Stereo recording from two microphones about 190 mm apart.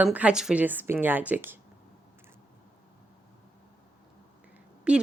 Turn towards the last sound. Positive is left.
turn(degrees=-5)  # may be behind; listen again after turning